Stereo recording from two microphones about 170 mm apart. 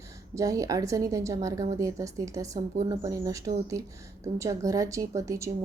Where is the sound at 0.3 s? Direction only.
20° right (ahead or behind).